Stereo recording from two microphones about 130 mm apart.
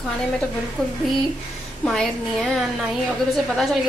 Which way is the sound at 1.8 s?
5° left (ahead or behind).